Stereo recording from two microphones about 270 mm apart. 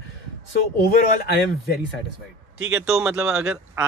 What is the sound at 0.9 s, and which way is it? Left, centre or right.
Speech, left.